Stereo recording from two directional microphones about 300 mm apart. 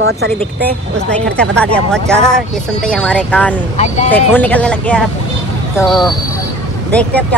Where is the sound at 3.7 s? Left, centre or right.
Left.